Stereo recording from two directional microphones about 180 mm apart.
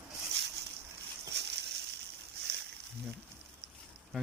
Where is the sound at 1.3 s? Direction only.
70° right (ahead or behind).